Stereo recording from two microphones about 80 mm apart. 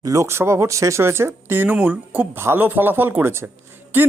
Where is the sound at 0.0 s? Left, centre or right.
Right.